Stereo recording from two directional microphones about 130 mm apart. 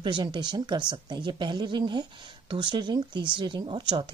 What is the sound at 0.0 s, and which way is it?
Speech, 40° right (ahead or behind).